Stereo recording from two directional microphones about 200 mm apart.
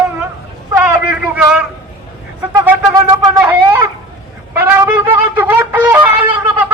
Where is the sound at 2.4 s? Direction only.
15° right (ahead or behind).